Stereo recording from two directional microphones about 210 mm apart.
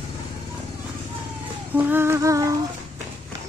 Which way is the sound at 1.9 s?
10° right (ahead or behind).